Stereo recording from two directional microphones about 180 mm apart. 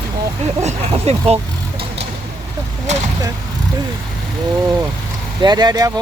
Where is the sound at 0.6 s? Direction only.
35° right (ahead or behind).